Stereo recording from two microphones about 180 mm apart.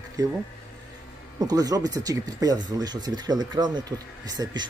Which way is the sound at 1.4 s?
20° right (ahead or behind).